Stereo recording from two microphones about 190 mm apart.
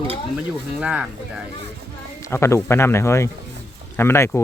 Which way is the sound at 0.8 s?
5° right (ahead or behind).